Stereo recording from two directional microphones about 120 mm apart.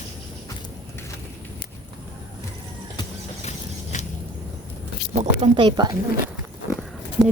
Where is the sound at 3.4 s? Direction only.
70° left (ahead or behind).